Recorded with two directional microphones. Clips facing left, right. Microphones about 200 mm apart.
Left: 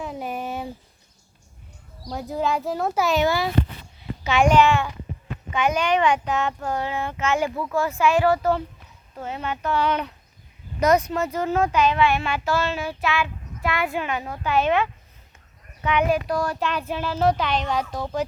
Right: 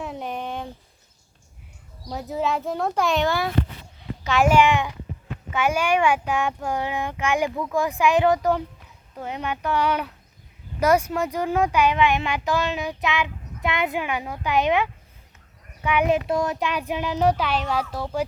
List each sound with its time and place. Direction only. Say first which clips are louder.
0.0 s a sound: left 1 dB; 5° left (ahead or behind)
2.0 s a child's voice: left 1 dB; centre (ahead or behind)
16.0 s speech: right 1 dB; 25° right (ahead or behind)